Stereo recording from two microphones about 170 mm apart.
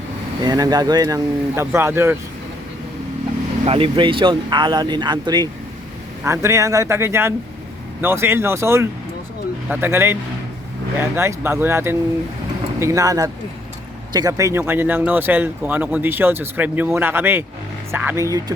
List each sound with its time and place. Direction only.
0.4 s speech: 20° right (ahead or behind)
3.7 s speech: 30° right (ahead or behind)